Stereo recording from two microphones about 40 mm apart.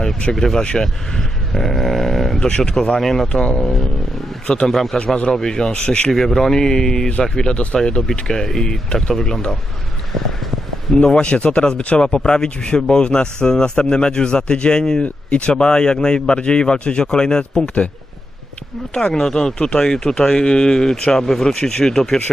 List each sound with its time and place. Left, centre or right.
0.3 s speech: centre
2.4 s speech: centre
4.4 s speech: left
4.7 s a man's voice: centre
4.9 s speech: left
6.1 s speech: centre
11.1 s speech: left
15.0 s speech: left
19.1 s speech: centre